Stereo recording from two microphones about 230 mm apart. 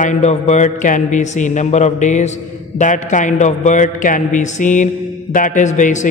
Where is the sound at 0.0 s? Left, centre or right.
Left.